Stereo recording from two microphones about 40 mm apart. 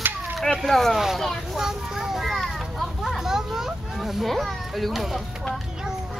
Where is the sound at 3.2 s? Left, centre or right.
Centre.